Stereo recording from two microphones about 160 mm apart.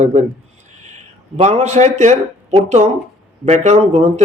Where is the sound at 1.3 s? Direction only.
40° right (ahead or behind).